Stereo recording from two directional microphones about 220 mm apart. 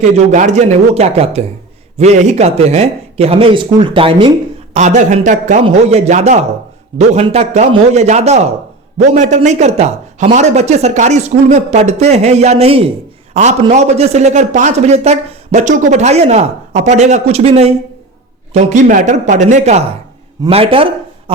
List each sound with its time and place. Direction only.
0.0 s a man's voice: 30° right (ahead or behind)